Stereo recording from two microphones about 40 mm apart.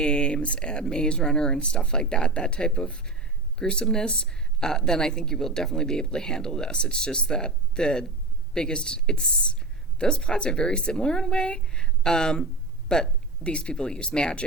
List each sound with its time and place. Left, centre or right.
0.0 s speech: left